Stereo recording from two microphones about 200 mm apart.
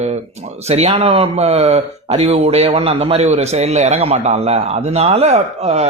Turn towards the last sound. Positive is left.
turn(degrees=-35)  # may be behind; listen again after turning